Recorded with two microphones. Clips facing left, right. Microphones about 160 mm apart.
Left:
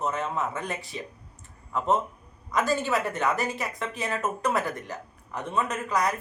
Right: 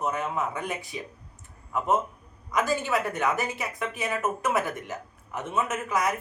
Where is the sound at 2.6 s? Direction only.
15° right (ahead or behind).